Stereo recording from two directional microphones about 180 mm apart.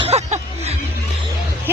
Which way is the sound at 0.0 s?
35° right (ahead or behind).